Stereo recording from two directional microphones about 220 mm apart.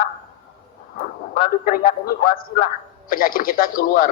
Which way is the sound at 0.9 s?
40° left (ahead or behind).